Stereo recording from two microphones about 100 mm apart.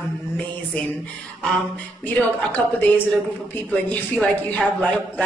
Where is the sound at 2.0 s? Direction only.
15° left (ahead or behind).